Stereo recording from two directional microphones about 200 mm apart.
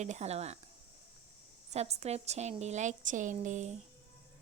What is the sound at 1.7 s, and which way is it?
Speech, 35° right (ahead or behind).